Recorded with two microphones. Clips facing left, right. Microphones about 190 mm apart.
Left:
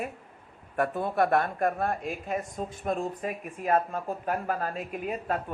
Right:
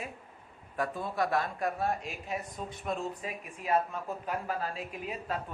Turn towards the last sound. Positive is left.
turn(degrees=55)  # may be behind; listen again after turning